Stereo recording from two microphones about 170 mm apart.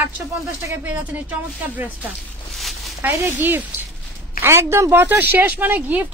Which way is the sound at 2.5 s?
Centre (ahead or behind).